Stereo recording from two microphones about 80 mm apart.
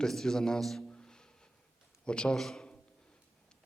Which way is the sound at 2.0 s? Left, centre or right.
Centre.